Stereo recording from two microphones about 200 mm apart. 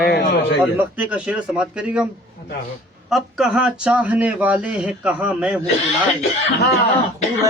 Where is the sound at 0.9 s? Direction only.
5° right (ahead or behind).